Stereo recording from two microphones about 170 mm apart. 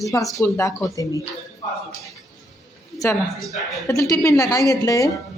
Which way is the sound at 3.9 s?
20° left (ahead or behind).